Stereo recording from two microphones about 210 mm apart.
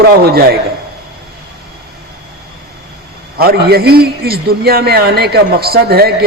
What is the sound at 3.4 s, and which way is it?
A man's voice, 45° right (ahead or behind).